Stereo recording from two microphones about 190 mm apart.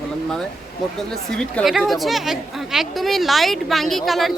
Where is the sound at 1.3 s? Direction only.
5° left (ahead or behind).